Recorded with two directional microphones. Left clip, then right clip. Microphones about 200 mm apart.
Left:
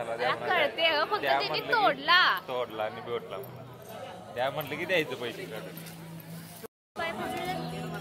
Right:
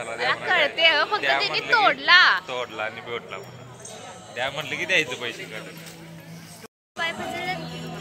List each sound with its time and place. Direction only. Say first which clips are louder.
0.2 s speech: right 6 dB; 10° right (ahead or behind)
2.4 s a man's voice: right 3 dB; 15° left (ahead or behind)
4.4 s a man's voice: right 4 dB; 25° left (ahead or behind)
7.0 s a sound: right 5 dB; 5° right (ahead or behind)